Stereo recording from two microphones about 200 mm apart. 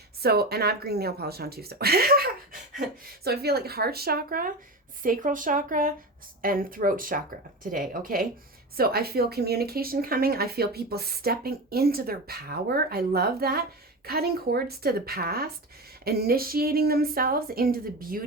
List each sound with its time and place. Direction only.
0.2 s speech: 50° right (ahead or behind)